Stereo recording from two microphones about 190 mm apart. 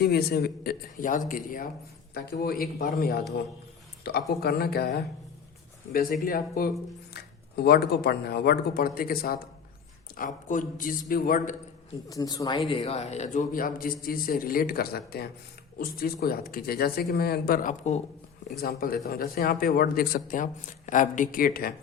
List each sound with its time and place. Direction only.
0.0 s speech: 55° left (ahead or behind)
4.4 s a man's voice: 55° left (ahead or behind)
12.0 s speech: 20° left (ahead or behind)
12.6 s speech: 30° left (ahead or behind)
18.6 s speech: 50° left (ahead or behind)